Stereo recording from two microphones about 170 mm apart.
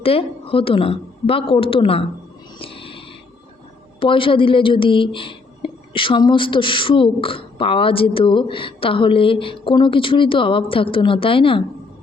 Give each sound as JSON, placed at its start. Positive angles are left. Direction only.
{"t": 0.0, "sound": "speech", "side_deg": 35}
{"t": 2.6, "sound": "a sound", "side_deg": 30}
{"t": 4.0, "sound": "speech", "side_deg": 30}